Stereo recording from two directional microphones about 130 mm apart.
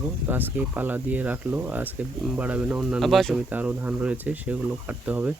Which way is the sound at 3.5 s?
15° right (ahead or behind).